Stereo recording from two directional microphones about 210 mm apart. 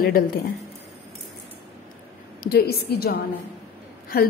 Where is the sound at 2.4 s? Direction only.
45° left (ahead or behind).